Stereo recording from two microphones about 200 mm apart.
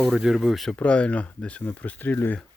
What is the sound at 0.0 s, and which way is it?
Speech, centre (ahead or behind).